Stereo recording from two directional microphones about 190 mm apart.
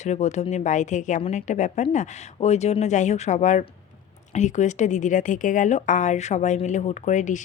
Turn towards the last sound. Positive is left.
turn(degrees=40)  # may be behind; listen again after turning